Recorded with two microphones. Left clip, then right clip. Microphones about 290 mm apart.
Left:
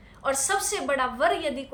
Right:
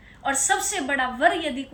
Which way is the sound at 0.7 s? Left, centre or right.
Centre.